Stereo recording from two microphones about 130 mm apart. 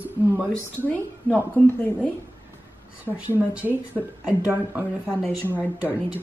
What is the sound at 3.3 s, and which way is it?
Speech, 15° right (ahead or behind).